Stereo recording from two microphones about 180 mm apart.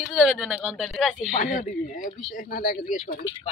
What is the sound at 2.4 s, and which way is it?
Speech, 55° left (ahead or behind).